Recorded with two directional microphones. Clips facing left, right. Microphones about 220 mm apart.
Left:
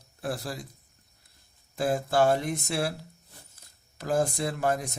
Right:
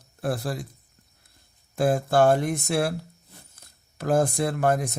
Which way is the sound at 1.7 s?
50° right (ahead or behind).